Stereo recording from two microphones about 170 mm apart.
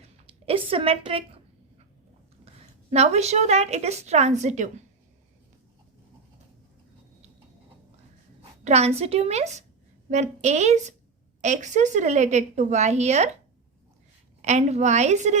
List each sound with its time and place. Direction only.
0.0 s speech: 35° right (ahead or behind)
2.9 s a woman's voice: 40° right (ahead or behind)
8.6 s a woman's voice: 40° right (ahead or behind)
14.4 s a woman's voice: 45° right (ahead or behind)